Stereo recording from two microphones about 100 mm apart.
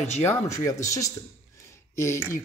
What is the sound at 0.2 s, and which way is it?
Speech, 25° left (ahead or behind).